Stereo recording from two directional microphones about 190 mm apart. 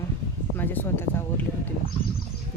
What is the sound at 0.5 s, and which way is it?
Speech, 10° left (ahead or behind).